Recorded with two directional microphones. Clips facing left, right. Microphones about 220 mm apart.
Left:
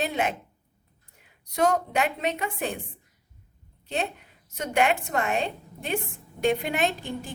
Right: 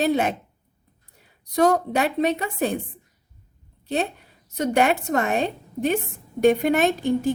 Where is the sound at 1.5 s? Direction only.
35° right (ahead or behind).